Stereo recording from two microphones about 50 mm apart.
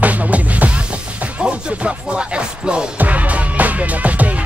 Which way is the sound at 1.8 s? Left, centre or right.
Centre.